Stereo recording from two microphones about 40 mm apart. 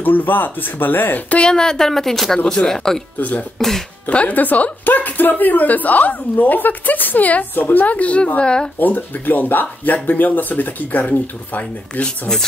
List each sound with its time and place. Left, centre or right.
0.0 s speech: left
1.5 s speech: centre
3.2 s speech: left
3.5 s speech: centre
4.3 s a woman's voice: left
8.4 s speech: left
8.7 s a woman's voice: left